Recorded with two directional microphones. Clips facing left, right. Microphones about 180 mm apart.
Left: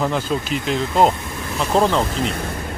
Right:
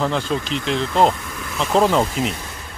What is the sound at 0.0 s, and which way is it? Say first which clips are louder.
Speech: even; 5° left (ahead or behind).